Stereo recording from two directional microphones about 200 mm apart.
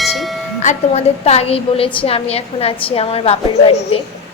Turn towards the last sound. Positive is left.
turn(degrees=30)  # may be behind; listen again after turning